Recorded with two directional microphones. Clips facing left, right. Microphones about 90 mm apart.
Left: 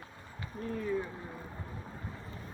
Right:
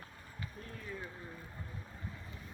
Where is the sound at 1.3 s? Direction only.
30° left (ahead or behind).